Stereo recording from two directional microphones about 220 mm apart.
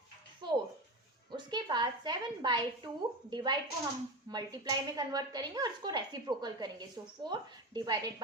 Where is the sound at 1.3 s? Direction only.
20° right (ahead or behind).